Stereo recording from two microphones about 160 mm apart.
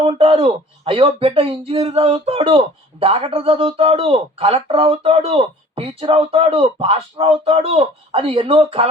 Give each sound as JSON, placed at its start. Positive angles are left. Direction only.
{"t": 0.0, "sound": "speech", "side_deg": -35}